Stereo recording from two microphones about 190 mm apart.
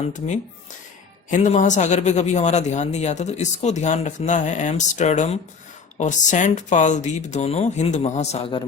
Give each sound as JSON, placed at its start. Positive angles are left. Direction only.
{"t": 1.3, "sound": "a man's voice", "side_deg": 40}